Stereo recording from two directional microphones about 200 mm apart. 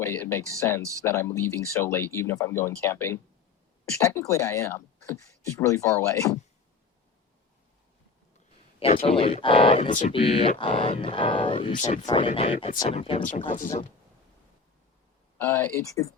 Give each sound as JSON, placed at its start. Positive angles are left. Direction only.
{"t": 0.0, "sound": "speech", "side_deg": 10}
{"t": 8.8, "sound": "speech", "side_deg": 30}
{"t": 15.4, "sound": "speech", "side_deg": 10}